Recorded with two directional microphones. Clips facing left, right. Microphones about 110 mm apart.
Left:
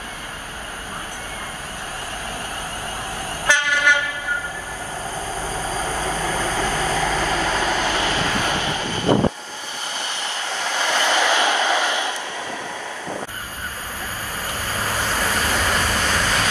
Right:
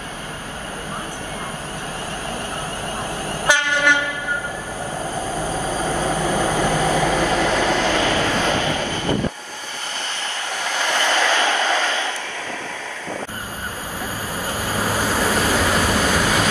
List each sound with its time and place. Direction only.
3.5 s train: 15° right (ahead or behind)
5.7 s train: 15° right (ahead or behind)
10.6 s train: 15° left (ahead or behind)
14.6 s waves: 10° right (ahead or behind)